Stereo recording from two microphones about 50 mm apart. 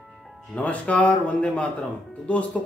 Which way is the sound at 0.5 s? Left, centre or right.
Left.